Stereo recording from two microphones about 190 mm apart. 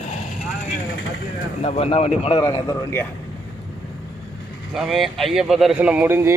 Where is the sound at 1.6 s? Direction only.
35° left (ahead or behind).